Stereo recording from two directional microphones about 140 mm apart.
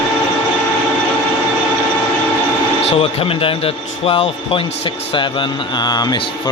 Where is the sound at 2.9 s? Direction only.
40° left (ahead or behind).